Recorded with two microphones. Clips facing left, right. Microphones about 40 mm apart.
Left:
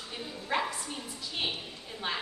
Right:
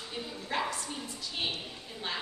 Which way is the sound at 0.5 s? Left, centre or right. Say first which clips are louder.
Left 2 dB; centre.